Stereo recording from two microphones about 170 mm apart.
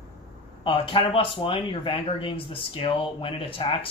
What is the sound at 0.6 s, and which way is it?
Speech, 30° left (ahead or behind).